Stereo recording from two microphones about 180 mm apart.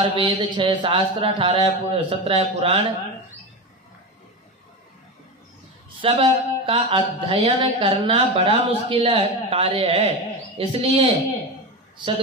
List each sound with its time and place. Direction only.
0.1 s speech: 25° right (ahead or behind)
5.9 s speech: 30° right (ahead or behind)